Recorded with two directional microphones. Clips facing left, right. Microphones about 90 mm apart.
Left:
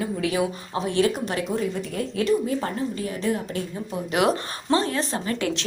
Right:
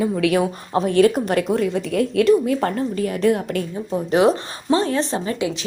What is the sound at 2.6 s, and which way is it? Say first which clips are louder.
Speech: right 6 dB; 55° right (ahead or behind).